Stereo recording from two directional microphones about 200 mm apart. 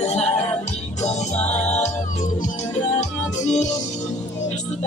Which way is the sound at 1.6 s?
35° left (ahead or behind).